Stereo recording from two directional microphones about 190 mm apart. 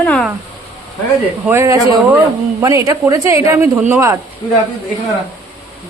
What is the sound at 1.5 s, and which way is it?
Speech, 15° right (ahead or behind).